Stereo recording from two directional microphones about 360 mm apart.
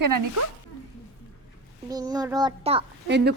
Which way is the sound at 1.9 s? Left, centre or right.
Centre.